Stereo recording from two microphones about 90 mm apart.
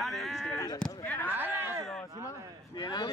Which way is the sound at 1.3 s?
20° right (ahead or behind).